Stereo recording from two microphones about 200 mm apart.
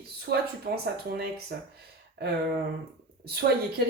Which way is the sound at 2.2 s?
55° right (ahead or behind).